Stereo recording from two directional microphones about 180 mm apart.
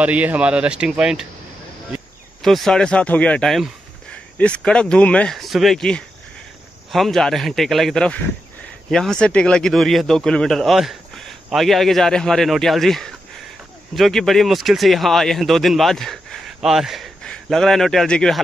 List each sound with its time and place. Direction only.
0.0 s speech: 10° right (ahead or behind)
2.4 s speech: centre (ahead or behind)